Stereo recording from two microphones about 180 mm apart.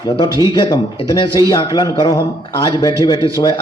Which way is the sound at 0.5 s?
25° left (ahead or behind).